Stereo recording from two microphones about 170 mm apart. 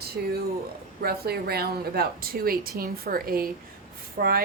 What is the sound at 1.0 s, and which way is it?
Speech, 65° right (ahead or behind).